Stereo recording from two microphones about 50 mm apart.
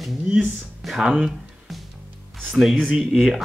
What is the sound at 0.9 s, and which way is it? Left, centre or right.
Speech, centre.